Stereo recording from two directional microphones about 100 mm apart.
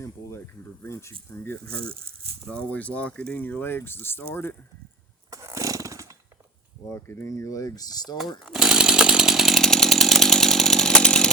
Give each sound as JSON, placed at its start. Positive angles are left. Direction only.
{"t": 0.0, "sound": "speech", "side_deg": 25}
{"t": 2.4, "sound": "speech", "side_deg": 10}
{"t": 5.3, "sound": "chainsaw", "side_deg": -30}
{"t": 6.9, "sound": "speech", "side_deg": 25}
{"t": 8.4, "sound": "chainsaw", "side_deg": -5}